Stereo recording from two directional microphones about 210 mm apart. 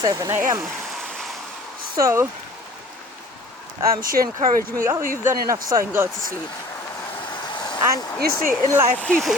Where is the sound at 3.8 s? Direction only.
45° right (ahead or behind).